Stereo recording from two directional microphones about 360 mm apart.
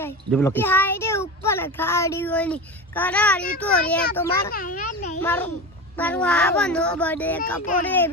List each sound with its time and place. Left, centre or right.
0.0 s a child's voice: centre
4.5 s a child's voice: left
5.2 s a child's voice: centre